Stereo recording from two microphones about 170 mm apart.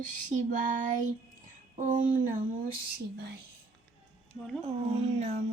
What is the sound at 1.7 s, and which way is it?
Speech, 50° right (ahead or behind).